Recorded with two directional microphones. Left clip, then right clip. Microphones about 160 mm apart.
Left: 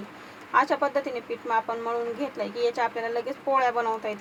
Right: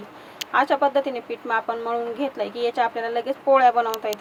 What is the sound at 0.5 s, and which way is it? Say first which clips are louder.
Speech: right 4 dB; 20° right (ahead or behind).